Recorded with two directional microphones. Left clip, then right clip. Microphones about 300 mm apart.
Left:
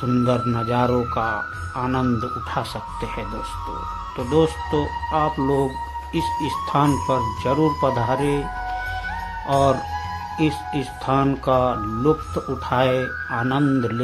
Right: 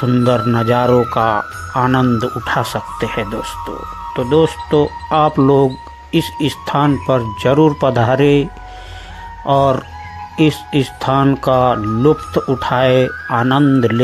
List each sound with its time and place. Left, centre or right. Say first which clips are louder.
0.1 s speech: right 7 dB; centre
9.5 s speech: right 6 dB; centre